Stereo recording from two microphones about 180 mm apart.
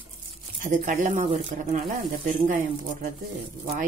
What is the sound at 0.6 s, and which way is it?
Speech, 45° right (ahead or behind).